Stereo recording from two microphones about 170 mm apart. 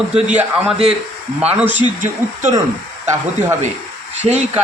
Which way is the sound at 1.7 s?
45° right (ahead or behind).